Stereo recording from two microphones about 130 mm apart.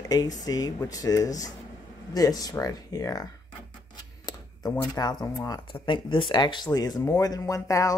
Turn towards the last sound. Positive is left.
turn(degrees=25)  # may be behind; listen again after turning